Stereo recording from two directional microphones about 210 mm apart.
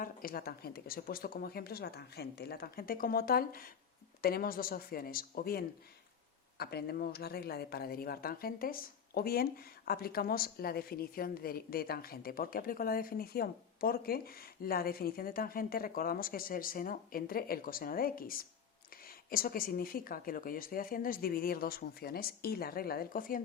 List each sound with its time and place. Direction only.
0.0 s speech: 45° left (ahead or behind)